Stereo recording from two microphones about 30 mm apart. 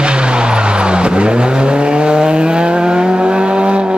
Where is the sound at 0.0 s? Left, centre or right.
Right.